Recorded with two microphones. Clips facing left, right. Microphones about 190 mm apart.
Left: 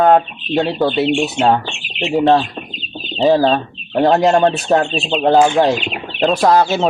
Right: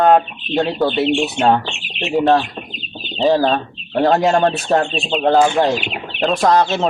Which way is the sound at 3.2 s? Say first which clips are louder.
Left 2 dB; centre (ahead or behind).